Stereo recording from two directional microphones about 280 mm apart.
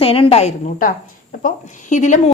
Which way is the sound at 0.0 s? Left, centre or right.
Centre.